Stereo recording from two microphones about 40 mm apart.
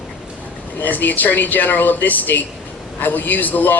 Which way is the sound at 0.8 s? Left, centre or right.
Left.